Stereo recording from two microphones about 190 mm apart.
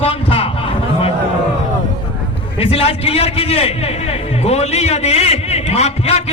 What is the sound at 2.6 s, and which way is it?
A man's voice, 30° left (ahead or behind).